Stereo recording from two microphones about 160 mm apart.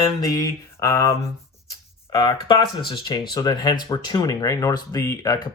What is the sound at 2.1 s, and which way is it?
Speech, 25° left (ahead or behind).